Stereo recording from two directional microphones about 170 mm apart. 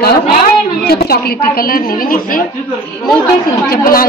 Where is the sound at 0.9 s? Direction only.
65° left (ahead or behind).